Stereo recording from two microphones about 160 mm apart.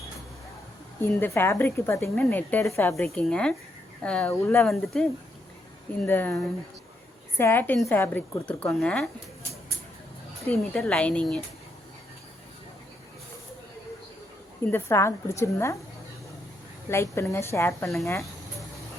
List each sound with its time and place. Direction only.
1.2 s a woman's voice: 15° left (ahead or behind)
10.4 s speech: 5° left (ahead or behind)
14.7 s a woman's voice: 15° left (ahead or behind)
16.9 s a woman's voice: 15° left (ahead or behind)